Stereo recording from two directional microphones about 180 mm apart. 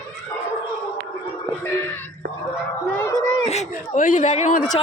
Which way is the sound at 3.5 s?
40° left (ahead or behind).